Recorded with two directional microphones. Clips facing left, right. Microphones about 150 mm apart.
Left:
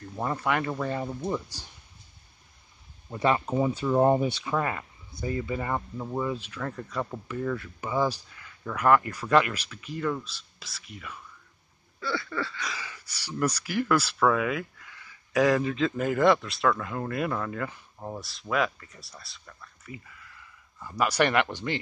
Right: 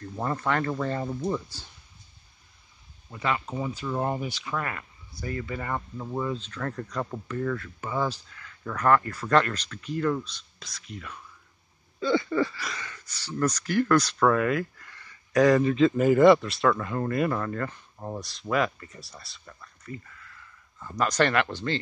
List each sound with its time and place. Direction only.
0.1 s speech: 5° left (ahead or behind)
3.1 s speech: 30° left (ahead or behind); by 11.1 s 5° left (ahead or behind)
12.0 s speech: 20° right (ahead or behind)
12.5 s speech: 5° left (ahead or behind)